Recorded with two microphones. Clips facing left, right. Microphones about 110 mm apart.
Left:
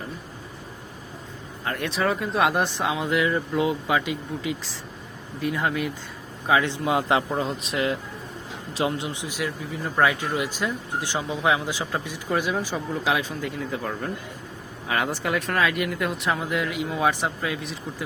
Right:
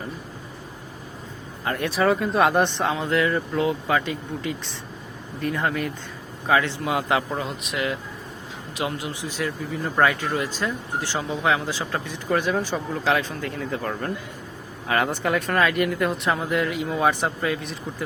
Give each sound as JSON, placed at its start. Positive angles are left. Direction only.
{"t": 1.6, "sound": "speech", "side_deg": 0}
{"t": 6.5, "sound": "a man's voice", "side_deg": 15}
{"t": 9.2, "sound": "speech", "side_deg": 15}
{"t": 9.8, "sound": "speech", "side_deg": 0}